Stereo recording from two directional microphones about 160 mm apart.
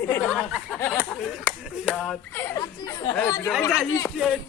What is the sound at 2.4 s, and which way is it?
Speech, 25° left (ahead or behind).